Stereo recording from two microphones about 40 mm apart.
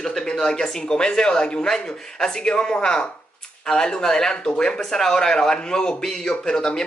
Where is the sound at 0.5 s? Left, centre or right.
Centre.